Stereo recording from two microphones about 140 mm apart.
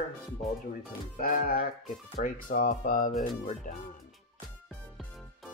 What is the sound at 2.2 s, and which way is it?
Speech, 80° left.